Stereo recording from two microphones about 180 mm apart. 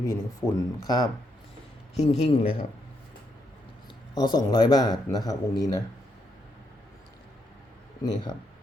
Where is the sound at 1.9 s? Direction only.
40° left (ahead or behind).